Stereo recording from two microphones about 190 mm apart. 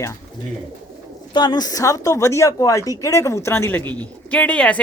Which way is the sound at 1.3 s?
25° left (ahead or behind).